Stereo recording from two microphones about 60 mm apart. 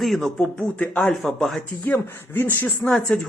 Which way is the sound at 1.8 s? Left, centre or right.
Left.